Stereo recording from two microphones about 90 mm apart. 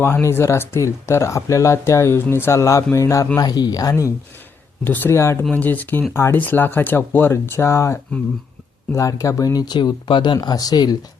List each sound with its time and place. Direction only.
0.0 s a man's voice: 30° left (ahead or behind)
3.3 s speech: 50° left (ahead or behind)
4.8 s speech: 20° left (ahead or behind)
5.1 s a man's voice: 30° left (ahead or behind)
5.4 s speech: 15° left (ahead or behind)
6.1 s speech: 30° left (ahead or behind)
9.0 s speech: 40° left (ahead or behind); by 10.3 s 55° left (ahead or behind)
10.3 s speech: 45° left (ahead or behind)